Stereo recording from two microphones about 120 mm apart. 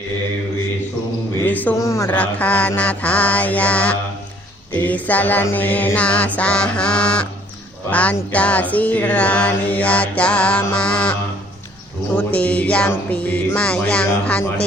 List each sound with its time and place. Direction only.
1.5 s speech: 15° left (ahead or behind)
1.7 s a man's voice: 25° left (ahead or behind)
2.0 s music: 10° left (ahead or behind)